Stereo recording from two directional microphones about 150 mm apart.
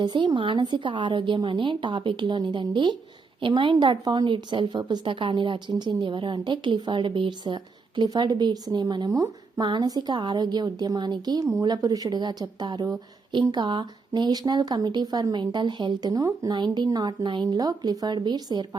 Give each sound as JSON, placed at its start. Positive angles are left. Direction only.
{"t": 0.0, "sound": "a woman's voice", "side_deg": -30}